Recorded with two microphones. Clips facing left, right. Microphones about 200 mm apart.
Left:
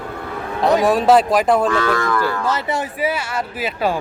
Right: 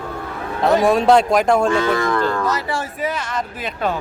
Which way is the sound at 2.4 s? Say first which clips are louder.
Left 1 dB; 25° left (ahead or behind).